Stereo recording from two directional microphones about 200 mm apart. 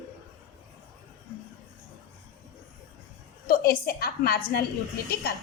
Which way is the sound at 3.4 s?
45° left (ahead or behind).